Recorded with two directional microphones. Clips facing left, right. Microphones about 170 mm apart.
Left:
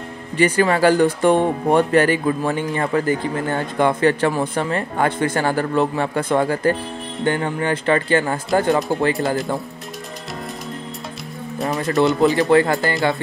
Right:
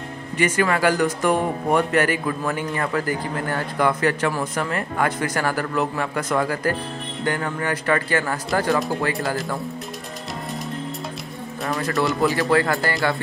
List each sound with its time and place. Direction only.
0.4 s speech: 30° left (ahead or behind)
11.6 s speech: 20° left (ahead or behind)